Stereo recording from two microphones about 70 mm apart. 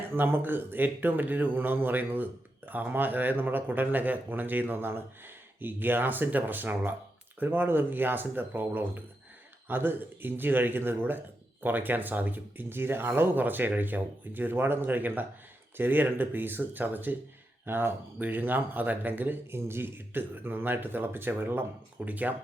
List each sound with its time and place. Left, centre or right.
0.2 s speech: right